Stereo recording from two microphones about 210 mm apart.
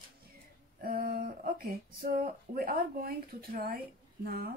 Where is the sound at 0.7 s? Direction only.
45° right (ahead or behind).